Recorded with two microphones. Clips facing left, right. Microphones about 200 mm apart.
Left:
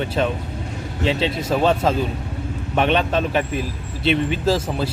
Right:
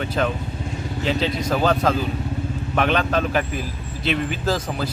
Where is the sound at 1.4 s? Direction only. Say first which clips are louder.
Left 2 dB; 25° left (ahead or behind).